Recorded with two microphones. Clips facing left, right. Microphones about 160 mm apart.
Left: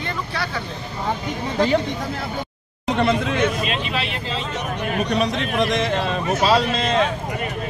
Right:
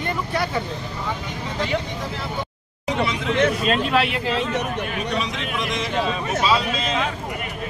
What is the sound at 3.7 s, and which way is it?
Speech, 60° right (ahead or behind).